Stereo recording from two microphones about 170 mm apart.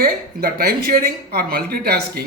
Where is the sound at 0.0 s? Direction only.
60° right (ahead or behind).